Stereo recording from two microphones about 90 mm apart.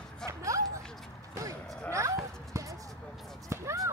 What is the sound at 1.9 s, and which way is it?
Basketball bounce, 35° right (ahead or behind).